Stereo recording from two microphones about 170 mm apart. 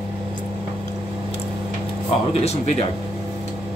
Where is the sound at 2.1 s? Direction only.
35° left (ahead or behind).